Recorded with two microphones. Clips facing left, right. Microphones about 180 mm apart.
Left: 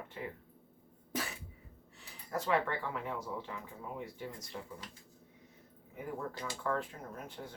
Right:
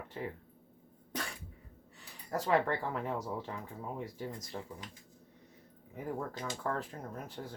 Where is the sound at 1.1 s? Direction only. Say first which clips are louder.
Left 1 dB; 5° left (ahead or behind).